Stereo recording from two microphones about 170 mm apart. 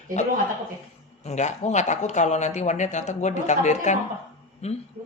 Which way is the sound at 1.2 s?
40° left (ahead or behind).